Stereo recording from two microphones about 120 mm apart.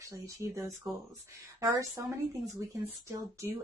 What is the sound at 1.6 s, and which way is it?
Speech, 25° right (ahead or behind).